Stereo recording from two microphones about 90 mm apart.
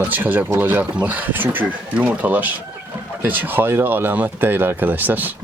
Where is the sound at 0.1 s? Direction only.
20° right (ahead or behind).